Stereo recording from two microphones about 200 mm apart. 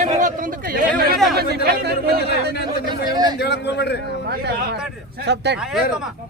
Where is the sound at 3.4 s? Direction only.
55° left (ahead or behind).